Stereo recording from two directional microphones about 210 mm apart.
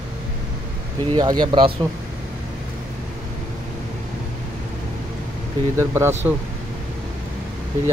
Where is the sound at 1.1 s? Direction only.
20° right (ahead or behind).